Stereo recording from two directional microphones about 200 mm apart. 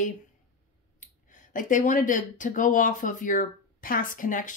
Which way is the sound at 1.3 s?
40° left (ahead or behind).